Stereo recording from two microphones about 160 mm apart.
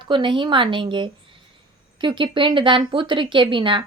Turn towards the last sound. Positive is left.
turn(degrees=-30)  # may be behind; listen again after turning